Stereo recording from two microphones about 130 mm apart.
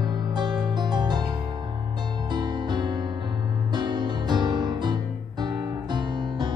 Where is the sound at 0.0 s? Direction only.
35° right (ahead or behind).